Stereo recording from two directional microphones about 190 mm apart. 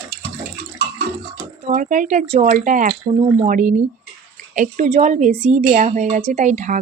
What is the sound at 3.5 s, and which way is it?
Speech, 40° right (ahead or behind).